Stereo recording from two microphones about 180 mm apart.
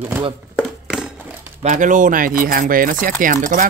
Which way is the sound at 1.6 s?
45° right (ahead or behind).